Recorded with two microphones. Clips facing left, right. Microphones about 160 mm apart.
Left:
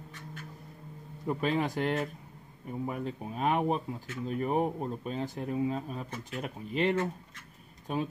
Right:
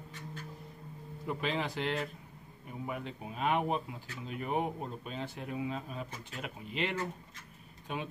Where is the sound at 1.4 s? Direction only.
45° left (ahead or behind).